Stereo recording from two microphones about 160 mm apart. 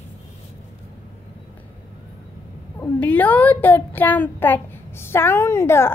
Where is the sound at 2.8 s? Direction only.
10° left (ahead or behind).